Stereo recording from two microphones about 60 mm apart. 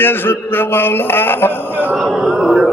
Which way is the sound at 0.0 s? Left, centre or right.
Left.